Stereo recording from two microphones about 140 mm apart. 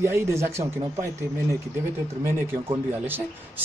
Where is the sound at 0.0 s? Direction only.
20° right (ahead or behind).